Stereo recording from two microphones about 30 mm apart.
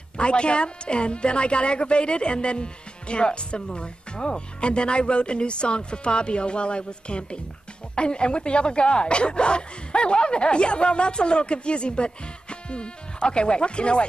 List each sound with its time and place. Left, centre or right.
0.2 s a woman's voice: left